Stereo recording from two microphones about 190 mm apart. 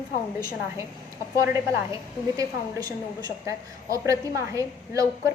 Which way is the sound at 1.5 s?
15° right (ahead or behind).